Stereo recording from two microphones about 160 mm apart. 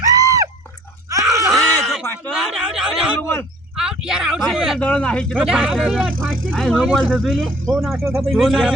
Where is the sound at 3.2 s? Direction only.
15° left (ahead or behind).